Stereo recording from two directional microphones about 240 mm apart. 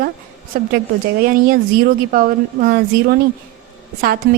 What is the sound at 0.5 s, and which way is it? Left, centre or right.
Speech, right.